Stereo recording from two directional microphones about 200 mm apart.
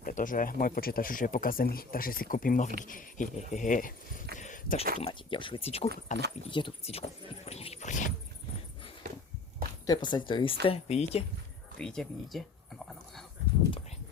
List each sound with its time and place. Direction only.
0.0 s speech: 40° left (ahead or behind)
4.4 s a sound: 40° left (ahead or behind)
5.0 s speech: 25° left (ahead or behind)
6.5 s speech: 25° left (ahead or behind)
9.8 s speech: 20° left (ahead or behind)
11.8 s speech: 5° left (ahead or behind)